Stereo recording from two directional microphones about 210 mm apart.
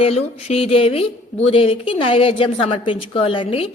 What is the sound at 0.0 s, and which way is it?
A woman's voice, 30° left (ahead or behind).